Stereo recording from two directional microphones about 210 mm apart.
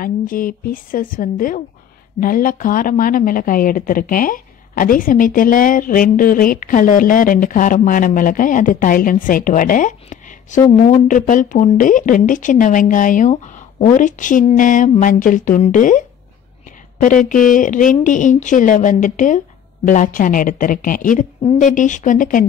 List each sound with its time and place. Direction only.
0.0 s speech: 40° left (ahead or behind)
17.0 s speech: 40° left (ahead or behind)